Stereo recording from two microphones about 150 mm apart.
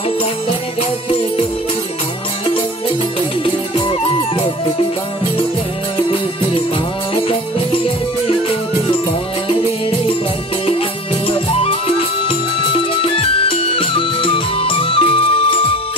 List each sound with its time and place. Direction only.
3.4 s music: 35° left (ahead or behind)
7.2 s music: 35° left (ahead or behind)
10.7 s music: 40° left (ahead or behind)
13.0 s music: 40° left (ahead or behind)